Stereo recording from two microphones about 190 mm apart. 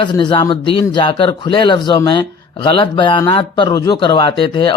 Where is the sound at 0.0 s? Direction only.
25° left (ahead or behind).